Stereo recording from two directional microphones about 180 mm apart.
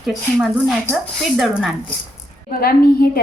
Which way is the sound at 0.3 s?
Centre (ahead or behind).